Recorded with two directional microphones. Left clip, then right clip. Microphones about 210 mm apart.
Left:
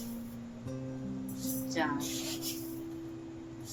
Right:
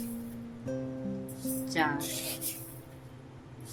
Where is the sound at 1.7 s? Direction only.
30° right (ahead or behind).